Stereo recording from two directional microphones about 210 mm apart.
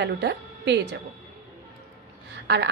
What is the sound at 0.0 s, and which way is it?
Speech, 55° right (ahead or behind).